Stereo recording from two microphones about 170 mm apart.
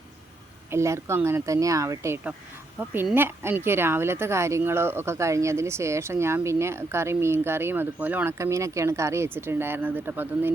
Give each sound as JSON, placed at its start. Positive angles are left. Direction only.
{"t": 0.7, "sound": "speech", "side_deg": -15}